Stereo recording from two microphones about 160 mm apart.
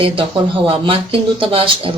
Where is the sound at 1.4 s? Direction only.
35° right (ahead or behind).